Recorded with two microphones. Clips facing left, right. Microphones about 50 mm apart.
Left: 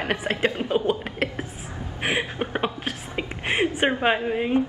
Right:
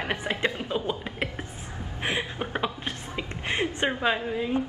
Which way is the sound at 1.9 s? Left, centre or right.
Left.